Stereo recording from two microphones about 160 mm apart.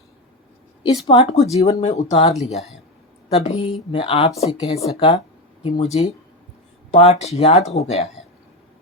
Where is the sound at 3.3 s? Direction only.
40° left (ahead or behind).